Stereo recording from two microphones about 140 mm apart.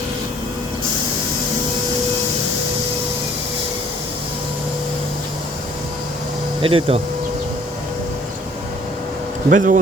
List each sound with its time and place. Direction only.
6.6 s speech: 40° right (ahead or behind)
9.5 s speech: 70° right (ahead or behind)